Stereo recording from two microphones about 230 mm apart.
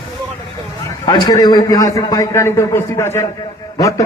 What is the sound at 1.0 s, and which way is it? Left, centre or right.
A man's voice, centre.